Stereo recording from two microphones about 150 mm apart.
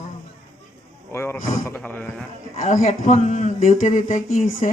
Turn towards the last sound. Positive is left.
turn(degrees=50)  # may be behind; listen again after turning